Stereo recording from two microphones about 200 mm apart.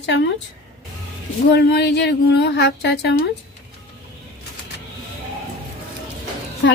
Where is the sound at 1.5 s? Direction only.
55° left (ahead or behind).